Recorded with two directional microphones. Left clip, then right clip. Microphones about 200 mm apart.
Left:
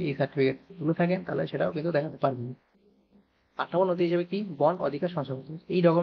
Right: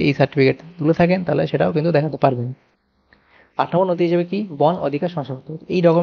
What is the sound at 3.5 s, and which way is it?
Speech, 35° right (ahead or behind).